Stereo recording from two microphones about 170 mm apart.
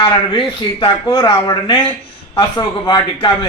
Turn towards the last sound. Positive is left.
turn(degrees=25)  # may be behind; listen again after turning